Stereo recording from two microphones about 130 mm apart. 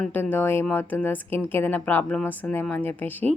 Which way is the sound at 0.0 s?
10° left (ahead or behind).